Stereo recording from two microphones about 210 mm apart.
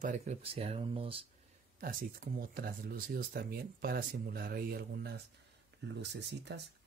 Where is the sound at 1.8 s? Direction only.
40° right (ahead or behind).